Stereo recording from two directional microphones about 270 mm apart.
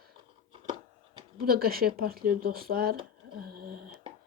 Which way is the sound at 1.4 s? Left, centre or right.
Right.